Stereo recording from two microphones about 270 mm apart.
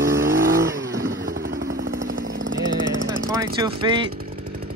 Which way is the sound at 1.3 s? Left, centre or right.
Right.